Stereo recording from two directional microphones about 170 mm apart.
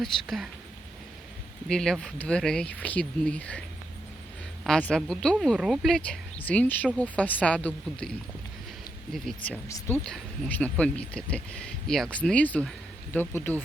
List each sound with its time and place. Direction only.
0.0 s speech: centre (ahead or behind)
1.6 s speech: 5° left (ahead or behind)
4.6 s speech: 5° left (ahead or behind)
9.1 s speech: 5° left (ahead or behind)
9.6 s speech: 15° left (ahead or behind)
10.0 s speech: 5° left (ahead or behind)